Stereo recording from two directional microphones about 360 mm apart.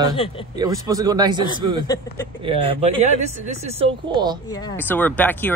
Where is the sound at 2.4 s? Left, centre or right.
Centre.